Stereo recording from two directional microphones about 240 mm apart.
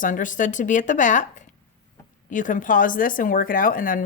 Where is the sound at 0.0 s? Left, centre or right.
Left.